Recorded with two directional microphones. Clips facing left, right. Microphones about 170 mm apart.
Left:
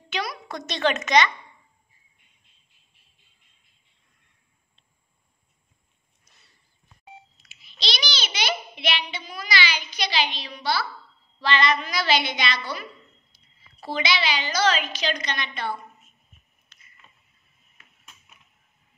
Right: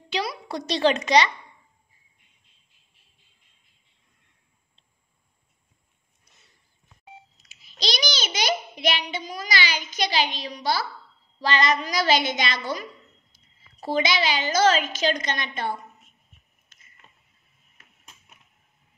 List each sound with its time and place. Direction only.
0.1 s a child's voice: 30° right (ahead or behind)
7.4 s a child's voice: 45° right (ahead or behind)
16.7 s a sound: 45° right (ahead or behind)